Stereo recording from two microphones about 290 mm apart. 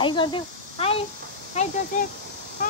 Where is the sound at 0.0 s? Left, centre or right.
Centre.